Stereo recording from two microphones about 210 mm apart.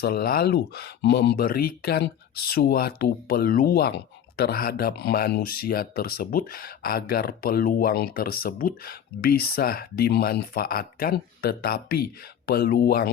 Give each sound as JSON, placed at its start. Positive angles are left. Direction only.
{"t": 0.0, "sound": "speech", "side_deg": 50}